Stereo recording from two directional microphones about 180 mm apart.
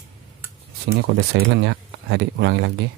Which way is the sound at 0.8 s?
60° right (ahead or behind).